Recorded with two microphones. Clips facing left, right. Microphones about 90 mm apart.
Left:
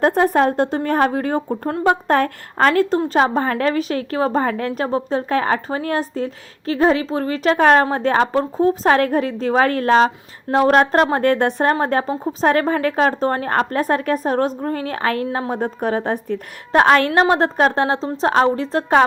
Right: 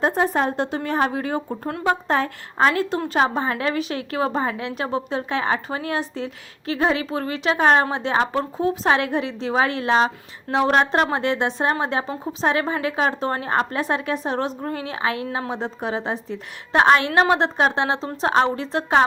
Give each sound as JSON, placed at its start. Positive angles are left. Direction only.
{"t": 0.0, "sound": "a woman's voice", "side_deg": 60}
{"t": 1.5, "sound": "a woman's voice", "side_deg": 30}
{"t": 2.0, "sound": "a woman's voice", "side_deg": 55}
{"t": 17.1, "sound": "a woman's voice", "side_deg": 35}